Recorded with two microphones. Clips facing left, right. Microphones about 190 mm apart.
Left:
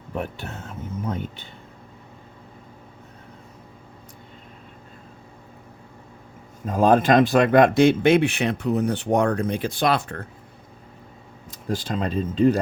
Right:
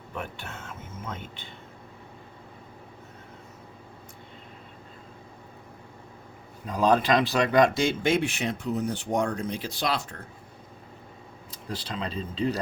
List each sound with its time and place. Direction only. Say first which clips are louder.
0.2 s speech: left 6 dB; 35° left (ahead or behind)
6.7 s speech: left 5 dB; 50° left (ahead or behind)
11.5 s speech: left 8 dB; 50° left (ahead or behind)